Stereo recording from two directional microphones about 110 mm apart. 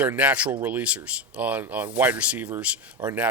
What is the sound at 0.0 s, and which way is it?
Speech, 15° right (ahead or behind).